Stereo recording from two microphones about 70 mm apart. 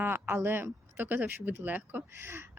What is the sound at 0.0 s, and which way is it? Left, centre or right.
Speech, right.